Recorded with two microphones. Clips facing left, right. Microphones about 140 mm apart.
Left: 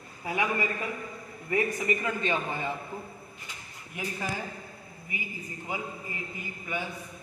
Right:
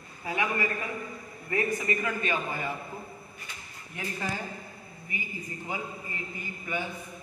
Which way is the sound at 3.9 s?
15° left (ahead or behind).